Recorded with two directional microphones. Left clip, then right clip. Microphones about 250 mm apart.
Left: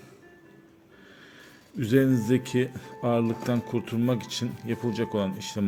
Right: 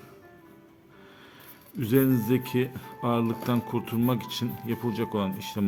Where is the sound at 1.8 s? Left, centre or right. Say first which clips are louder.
Left 1 dB; centre.